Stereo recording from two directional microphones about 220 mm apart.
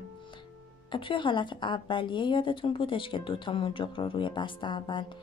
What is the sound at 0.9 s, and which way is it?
A woman's voice, 20° left (ahead or behind).